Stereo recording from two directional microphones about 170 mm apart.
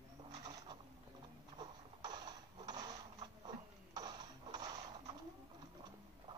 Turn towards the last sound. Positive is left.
turn(degrees=-25)  # may be behind; listen again after turning